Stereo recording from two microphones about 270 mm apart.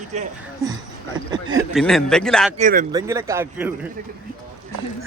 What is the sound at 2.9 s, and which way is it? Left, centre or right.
Speech, centre.